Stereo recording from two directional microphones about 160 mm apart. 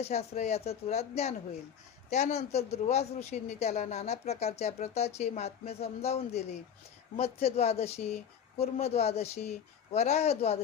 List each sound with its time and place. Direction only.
0.0 s speech: 40° left (ahead or behind)